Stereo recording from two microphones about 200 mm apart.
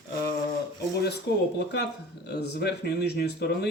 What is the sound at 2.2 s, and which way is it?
Speech, 55° left (ahead or behind).